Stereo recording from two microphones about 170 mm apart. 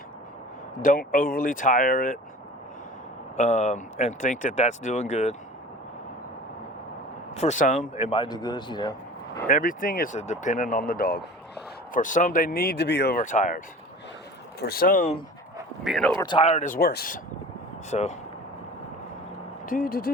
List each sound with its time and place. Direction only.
0.8 s speech: 55° left (ahead or behind)
3.3 s speech: 45° left (ahead or behind)
7.3 s speech: 45° left (ahead or behind); by 9.4 s 25° left (ahead or behind)
9.5 s speech: 55° left (ahead or behind)
10.2 s speech: 45° left (ahead or behind); by 13.2 s 70° left (ahead or behind)
13.2 s speech: 45° left (ahead or behind)
14.6 s speech: 60° left (ahead or behind)
15.8 s speech: centre (ahead or behind)
16.2 s speech: 30° left (ahead or behind); by 17.2 s 65° left (ahead or behind)
17.9 s speech: 40° left (ahead or behind)
19.6 s speech: 55° left (ahead or behind)